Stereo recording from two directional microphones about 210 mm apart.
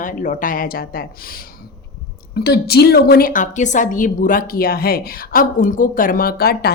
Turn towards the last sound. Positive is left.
turn(degrees=45)  # may be behind; listen again after turning